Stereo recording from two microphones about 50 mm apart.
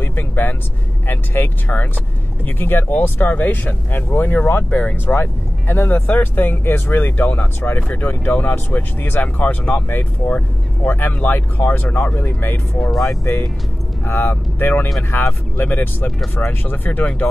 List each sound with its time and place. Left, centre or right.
0.0 s vehicle: left
1.0 s speech: left
12.9 s speech: centre
13.2 s speech: left